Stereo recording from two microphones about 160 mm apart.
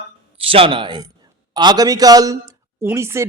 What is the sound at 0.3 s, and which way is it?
A man's voice, 35° right (ahead or behind).